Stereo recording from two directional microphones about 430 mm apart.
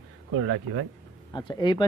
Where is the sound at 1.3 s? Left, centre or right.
Centre.